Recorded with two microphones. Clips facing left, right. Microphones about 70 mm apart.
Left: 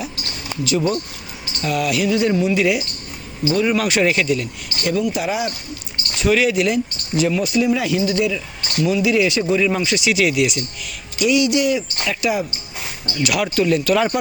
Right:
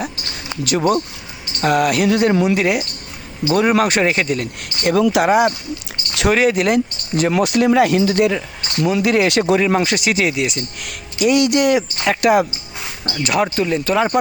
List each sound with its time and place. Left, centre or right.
0.6 s speech: right
2.6 s speech: right
6.3 s speech: right
6.7 s speech: right
10.8 s speech: right
13.2 s speech: right